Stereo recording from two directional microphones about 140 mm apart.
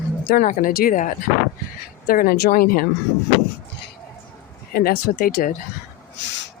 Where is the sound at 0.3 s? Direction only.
85° left.